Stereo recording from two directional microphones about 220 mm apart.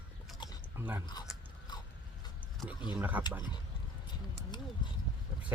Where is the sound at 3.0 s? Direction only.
10° right (ahead or behind).